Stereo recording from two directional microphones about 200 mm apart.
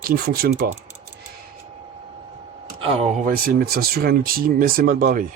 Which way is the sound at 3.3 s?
45° right (ahead or behind).